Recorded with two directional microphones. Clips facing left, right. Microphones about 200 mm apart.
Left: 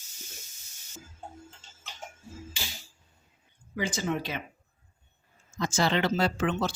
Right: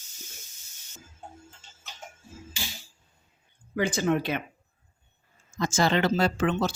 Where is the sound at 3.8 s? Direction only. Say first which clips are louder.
Right 5 dB; 55° right (ahead or behind).